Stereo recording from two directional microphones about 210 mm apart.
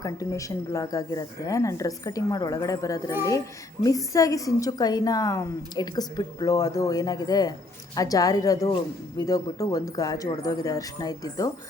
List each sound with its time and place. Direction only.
0.0 s a woman's voice: 15° left (ahead or behind)